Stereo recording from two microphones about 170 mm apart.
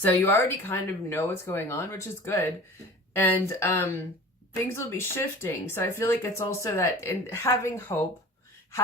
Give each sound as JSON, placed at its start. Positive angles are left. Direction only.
{"t": 0.0, "sound": "speech", "side_deg": 10}